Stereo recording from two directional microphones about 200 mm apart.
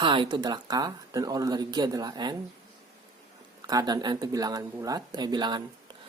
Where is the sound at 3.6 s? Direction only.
20° right (ahead or behind).